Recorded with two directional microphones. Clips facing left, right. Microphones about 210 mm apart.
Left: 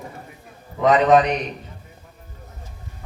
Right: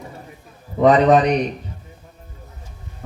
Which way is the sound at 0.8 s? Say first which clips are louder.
Right 2 dB; 35° right (ahead or behind).